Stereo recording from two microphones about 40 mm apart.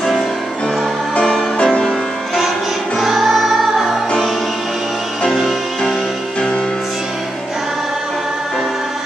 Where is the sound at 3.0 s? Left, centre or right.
Centre.